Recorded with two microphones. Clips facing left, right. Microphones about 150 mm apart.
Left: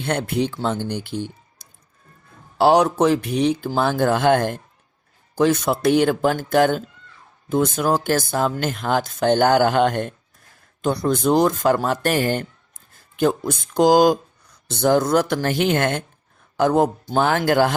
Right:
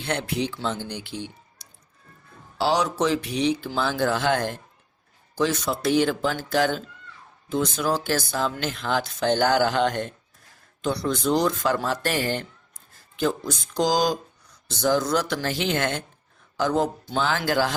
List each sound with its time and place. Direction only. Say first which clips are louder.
0.0 s speech: left 5 dB; 50° left (ahead or behind)